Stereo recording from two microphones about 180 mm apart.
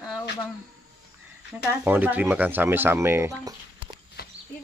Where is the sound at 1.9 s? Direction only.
10° right (ahead or behind).